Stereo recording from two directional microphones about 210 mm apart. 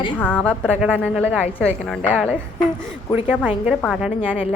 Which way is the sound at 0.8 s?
5° right (ahead or behind).